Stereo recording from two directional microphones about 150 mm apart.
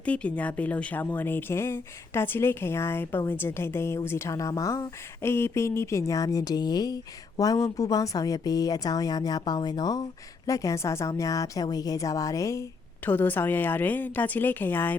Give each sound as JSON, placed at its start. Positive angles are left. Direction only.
{"t": 0.0, "sound": "a woman's voice", "side_deg": 10}